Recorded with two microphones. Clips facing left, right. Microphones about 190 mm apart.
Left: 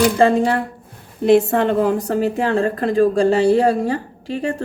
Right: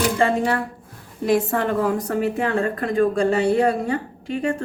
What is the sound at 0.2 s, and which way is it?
Speech, 30° left (ahead or behind).